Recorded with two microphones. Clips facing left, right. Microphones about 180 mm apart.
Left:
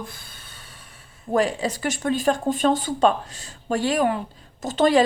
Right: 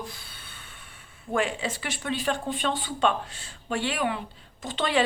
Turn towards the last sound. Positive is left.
turn(degrees=40)  # may be behind; listen again after turning